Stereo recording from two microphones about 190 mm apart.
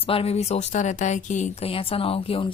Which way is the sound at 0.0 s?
30° left (ahead or behind).